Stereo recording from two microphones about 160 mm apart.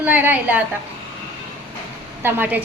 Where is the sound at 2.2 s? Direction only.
15° right (ahead or behind).